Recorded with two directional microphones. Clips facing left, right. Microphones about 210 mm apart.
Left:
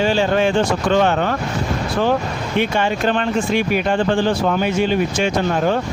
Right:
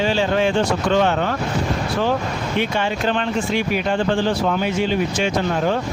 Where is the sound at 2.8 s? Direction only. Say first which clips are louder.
Left 3 dB; 55° left (ahead or behind).